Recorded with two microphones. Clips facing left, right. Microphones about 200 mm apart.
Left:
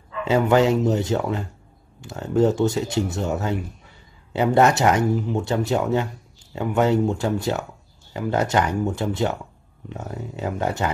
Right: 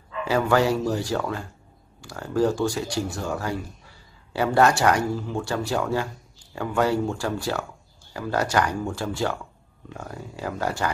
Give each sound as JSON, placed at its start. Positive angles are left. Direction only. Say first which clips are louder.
{"t": 0.2, "sound": "speech", "louder": "left 3 dB", "side_deg": 20}